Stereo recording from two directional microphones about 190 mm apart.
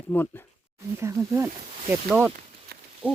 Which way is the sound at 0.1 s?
10° left (ahead or behind).